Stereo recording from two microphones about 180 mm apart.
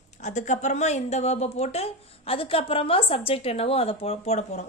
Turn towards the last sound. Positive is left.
turn(degrees=40)  # may be behind; listen again after turning